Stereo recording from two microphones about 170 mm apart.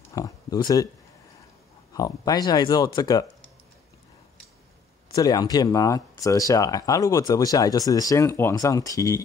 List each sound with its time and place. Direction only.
0.1 s a sound: 20° left (ahead or behind)
2.0 s speech: 20° left (ahead or behind)
5.1 s speech: 20° left (ahead or behind)